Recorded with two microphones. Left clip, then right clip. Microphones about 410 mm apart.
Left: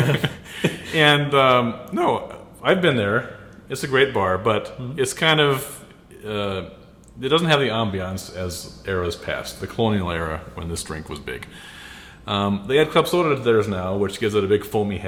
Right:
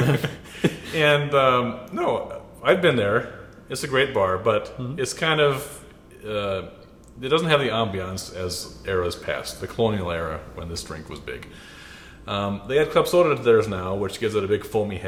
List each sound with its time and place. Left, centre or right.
0.2 s beatboxing: centre
0.9 s a man's voice: centre